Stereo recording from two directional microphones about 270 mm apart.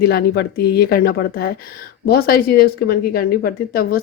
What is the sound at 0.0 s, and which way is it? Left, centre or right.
Speech, left.